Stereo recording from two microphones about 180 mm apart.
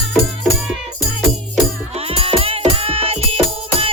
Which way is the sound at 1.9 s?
35° right (ahead or behind).